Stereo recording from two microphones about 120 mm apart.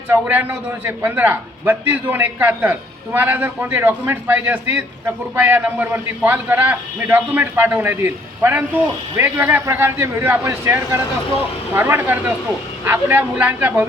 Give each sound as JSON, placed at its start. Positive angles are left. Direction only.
{"t": 0.1, "sound": "a man's voice", "side_deg": -15}